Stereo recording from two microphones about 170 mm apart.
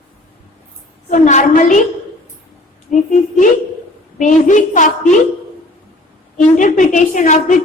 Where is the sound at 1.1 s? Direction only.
45° left (ahead or behind).